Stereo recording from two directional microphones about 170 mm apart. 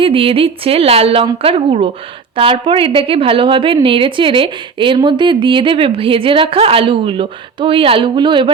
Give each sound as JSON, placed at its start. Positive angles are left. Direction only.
{"t": 0.0, "sound": "a woman's voice", "side_deg": -35}